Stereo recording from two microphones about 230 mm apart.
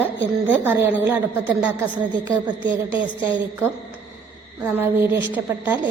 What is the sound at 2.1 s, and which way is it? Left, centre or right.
Speech, centre.